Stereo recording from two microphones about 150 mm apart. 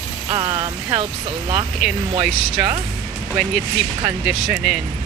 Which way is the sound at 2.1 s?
40° right (ahead or behind).